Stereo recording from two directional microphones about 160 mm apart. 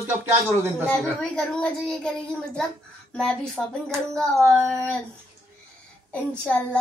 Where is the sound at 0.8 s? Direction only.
5° left (ahead or behind).